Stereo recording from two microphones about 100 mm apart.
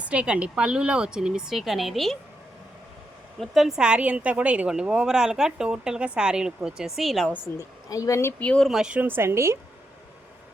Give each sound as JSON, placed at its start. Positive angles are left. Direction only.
{"t": 0.0, "sound": "a woman's voice", "side_deg": -10}
{"t": 3.4, "sound": "a woman's voice", "side_deg": 0}
{"t": 7.3, "sound": "a woman's voice", "side_deg": 20}
{"t": 7.6, "sound": "a woman's voice", "side_deg": 35}
{"t": 8.4, "sound": "speech", "side_deg": 15}
{"t": 8.6, "sound": "speech", "side_deg": -5}
{"t": 9.0, "sound": "a woman's voice", "side_deg": -20}